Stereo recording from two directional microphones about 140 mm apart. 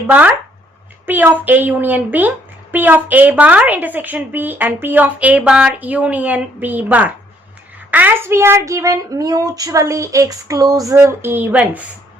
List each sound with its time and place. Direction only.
0.1 s a woman's voice: 10° right (ahead or behind)